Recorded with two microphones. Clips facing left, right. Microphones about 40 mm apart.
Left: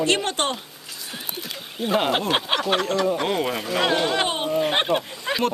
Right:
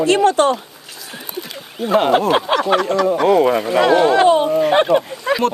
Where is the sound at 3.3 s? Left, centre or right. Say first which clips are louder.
Right 11 dB; centre.